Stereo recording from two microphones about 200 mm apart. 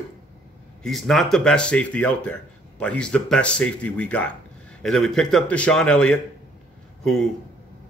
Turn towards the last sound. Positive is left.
turn(degrees=0)  # may be behind; listen again after turning